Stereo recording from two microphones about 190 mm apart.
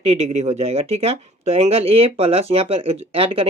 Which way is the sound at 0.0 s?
35° right (ahead or behind).